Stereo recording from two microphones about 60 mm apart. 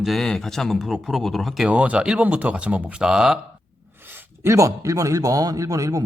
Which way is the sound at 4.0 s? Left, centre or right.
Right.